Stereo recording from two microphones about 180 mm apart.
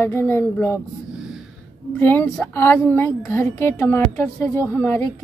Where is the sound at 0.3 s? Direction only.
10° left (ahead or behind).